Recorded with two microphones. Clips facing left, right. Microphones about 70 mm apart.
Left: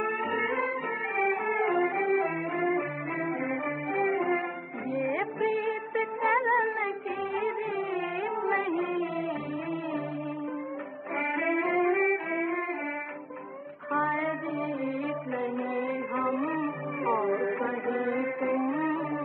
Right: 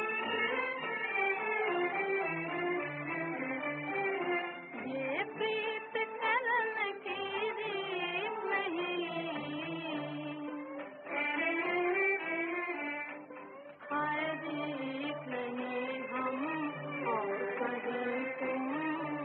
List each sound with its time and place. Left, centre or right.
0.2 s music: left
11.1 s music: left
13.9 s child singing: left
14.5 s music: left